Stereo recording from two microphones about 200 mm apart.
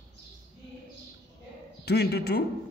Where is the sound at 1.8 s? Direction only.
55° left (ahead or behind).